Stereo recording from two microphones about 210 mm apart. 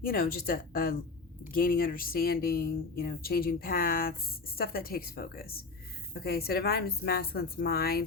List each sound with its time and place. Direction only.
0.0 s speech: 45° left (ahead or behind)